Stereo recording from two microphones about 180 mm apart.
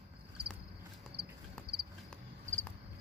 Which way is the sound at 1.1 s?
70° right (ahead or behind).